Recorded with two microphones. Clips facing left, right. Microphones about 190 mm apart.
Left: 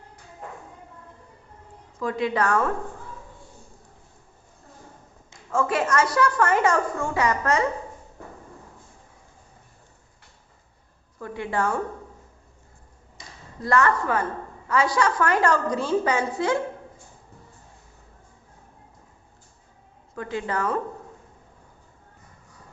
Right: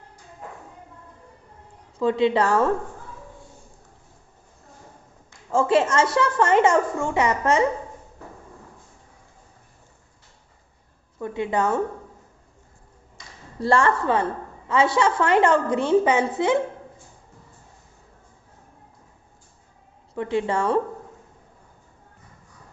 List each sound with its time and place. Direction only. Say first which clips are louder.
2.0 s a woman's voice: right 5 dB; 25° right (ahead or behind)
5.5 s a woman's voice: right 4 dB; 30° right (ahead or behind)
11.2 s a woman's voice: right 3 dB; 20° right (ahead or behind)
13.6 s a woman's voice: right 2 dB; 30° right (ahead or behind)
20.1 s a woman's voice: right 5 dB; 25° right (ahead or behind)